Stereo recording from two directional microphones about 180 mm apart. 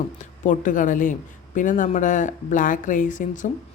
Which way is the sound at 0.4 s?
45° left (ahead or behind).